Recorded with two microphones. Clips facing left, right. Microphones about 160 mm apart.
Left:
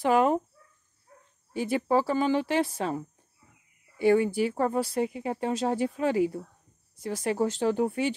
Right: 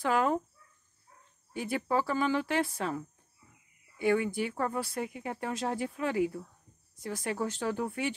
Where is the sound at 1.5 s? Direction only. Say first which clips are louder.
Left 6 dB; 25° left (ahead or behind).